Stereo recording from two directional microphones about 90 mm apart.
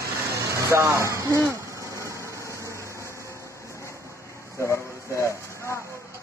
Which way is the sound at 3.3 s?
35° left (ahead or behind).